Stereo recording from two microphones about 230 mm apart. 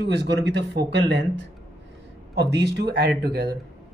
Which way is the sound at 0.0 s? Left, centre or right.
Right.